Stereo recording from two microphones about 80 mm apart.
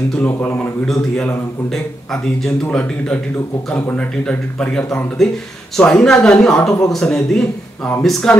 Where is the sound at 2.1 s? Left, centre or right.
Centre.